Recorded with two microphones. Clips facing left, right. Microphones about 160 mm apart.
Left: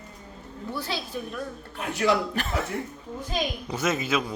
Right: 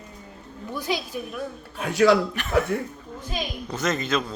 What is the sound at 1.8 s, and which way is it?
Speech, 90° right.